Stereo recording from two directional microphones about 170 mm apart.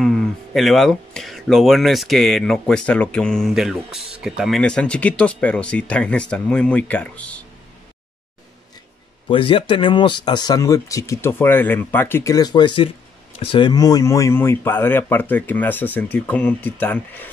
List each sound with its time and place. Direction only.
0.0 s speech: centre (ahead or behind)
9.3 s speech: 30° left (ahead or behind); by 17.3 s 10° left (ahead or behind)